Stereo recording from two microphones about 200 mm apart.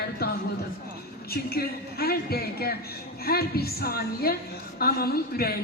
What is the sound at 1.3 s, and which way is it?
A woman's voice, 50° left (ahead or behind).